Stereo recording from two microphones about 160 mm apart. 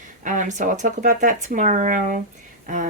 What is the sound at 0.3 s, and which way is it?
Speech, 50° right (ahead or behind).